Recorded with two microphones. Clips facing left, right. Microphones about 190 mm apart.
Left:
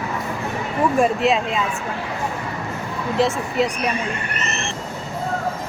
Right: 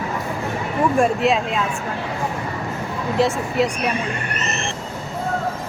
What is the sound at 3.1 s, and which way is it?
Speech, centre (ahead or behind).